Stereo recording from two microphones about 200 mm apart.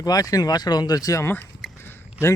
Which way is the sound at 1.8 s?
10° left (ahead or behind).